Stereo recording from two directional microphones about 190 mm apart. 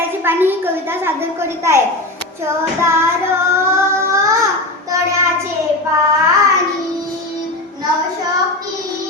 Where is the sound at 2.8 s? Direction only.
15° right (ahead or behind).